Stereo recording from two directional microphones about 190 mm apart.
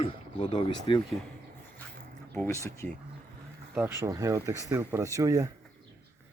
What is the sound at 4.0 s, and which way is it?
Speech, 15° right (ahead or behind).